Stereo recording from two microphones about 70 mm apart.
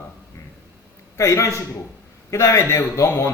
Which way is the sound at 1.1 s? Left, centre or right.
Left.